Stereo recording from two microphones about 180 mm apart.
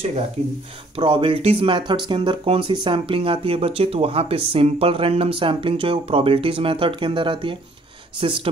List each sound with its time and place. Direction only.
0.9 s speech: 30° right (ahead or behind)